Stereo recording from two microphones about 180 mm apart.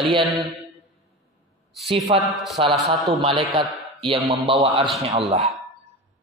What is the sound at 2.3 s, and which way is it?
Speech, centre (ahead or behind).